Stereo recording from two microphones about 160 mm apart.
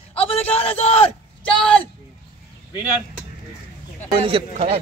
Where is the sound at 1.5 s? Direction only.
5° left (ahead or behind).